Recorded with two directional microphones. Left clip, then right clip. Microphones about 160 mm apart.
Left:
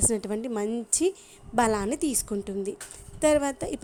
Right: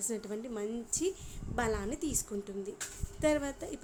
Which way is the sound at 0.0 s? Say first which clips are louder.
Left 10 dB; 50° left (ahead or behind).